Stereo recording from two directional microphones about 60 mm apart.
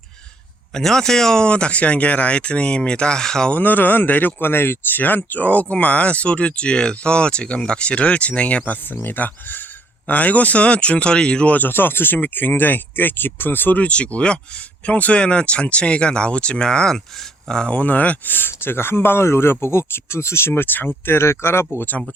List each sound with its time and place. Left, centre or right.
0.7 s speech: centre
3.5 s speech: left
20.5 s speech: left
21.8 s speech: left